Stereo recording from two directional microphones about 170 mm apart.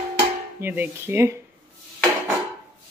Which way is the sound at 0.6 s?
10° right (ahead or behind).